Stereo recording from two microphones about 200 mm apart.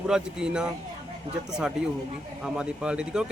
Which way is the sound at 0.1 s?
5° right (ahead or behind).